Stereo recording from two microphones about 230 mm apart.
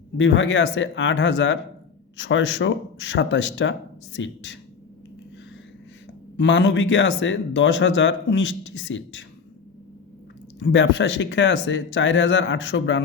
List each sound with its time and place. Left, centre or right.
0.2 s speech: left
6.3 s speech: left
10.6 s speech: left